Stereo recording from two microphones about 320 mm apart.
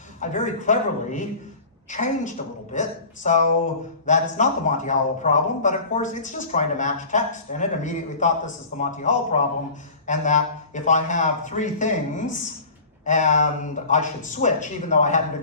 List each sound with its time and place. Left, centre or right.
0.2 s speech: left